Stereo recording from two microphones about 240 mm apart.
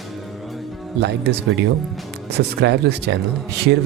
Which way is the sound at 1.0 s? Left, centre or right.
Right.